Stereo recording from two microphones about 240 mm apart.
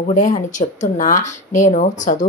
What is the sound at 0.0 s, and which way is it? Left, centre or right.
Speech, left.